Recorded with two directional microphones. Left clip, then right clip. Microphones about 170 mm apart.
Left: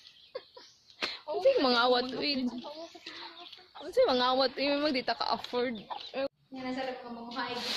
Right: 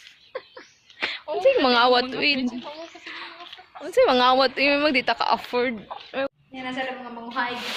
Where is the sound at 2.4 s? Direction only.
20° left (ahead or behind).